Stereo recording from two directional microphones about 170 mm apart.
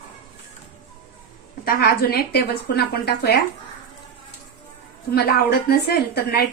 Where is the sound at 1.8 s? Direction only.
65° left (ahead or behind).